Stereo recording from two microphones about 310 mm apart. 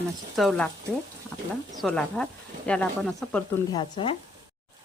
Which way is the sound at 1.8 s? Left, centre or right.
Centre.